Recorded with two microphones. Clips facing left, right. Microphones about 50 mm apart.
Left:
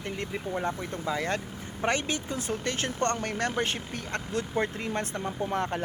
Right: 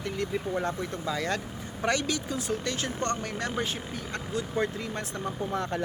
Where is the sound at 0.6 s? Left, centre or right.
Left.